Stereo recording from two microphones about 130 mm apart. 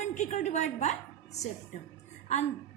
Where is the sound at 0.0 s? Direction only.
65° left (ahead or behind).